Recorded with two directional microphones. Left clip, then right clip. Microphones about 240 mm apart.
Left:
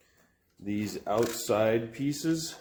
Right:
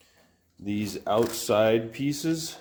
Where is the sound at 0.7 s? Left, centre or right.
Right.